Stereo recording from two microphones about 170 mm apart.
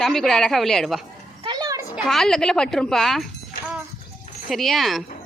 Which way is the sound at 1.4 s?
25° right (ahead or behind).